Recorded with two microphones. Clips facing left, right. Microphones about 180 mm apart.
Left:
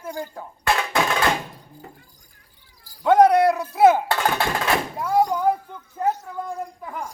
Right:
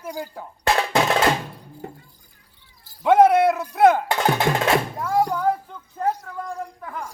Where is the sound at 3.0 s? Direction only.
5° right (ahead or behind); by 5.5 s 15° left (ahead or behind).